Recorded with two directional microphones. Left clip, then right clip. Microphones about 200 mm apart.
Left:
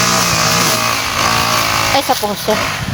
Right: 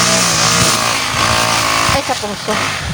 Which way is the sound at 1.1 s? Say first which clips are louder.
Even; 5° right (ahead or behind).